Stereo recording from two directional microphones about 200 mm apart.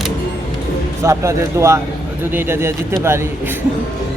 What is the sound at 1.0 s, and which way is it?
Speech, 15° right (ahead or behind).